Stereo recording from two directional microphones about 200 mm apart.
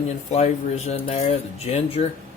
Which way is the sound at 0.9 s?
35° left (ahead or behind).